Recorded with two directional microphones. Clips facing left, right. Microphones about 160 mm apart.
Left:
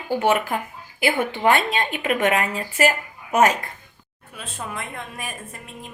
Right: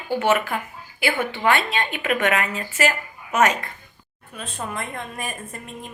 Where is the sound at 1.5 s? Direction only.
40° left (ahead or behind).